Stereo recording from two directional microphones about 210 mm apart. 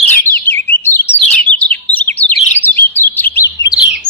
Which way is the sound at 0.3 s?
10° left (ahead or behind).